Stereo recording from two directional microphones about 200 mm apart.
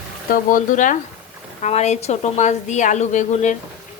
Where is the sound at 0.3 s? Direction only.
40° left (ahead or behind).